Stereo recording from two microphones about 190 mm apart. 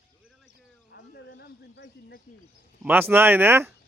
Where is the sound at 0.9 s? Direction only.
65° left (ahead or behind).